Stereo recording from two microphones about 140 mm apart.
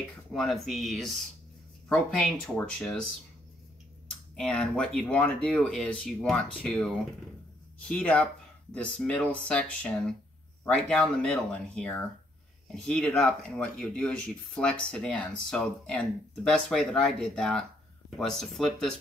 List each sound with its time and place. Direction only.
0.3 s speech: centre (ahead or behind)
4.4 s speech: 5° left (ahead or behind)